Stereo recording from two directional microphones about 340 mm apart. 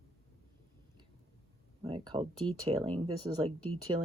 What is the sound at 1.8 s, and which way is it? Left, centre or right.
Speech, centre.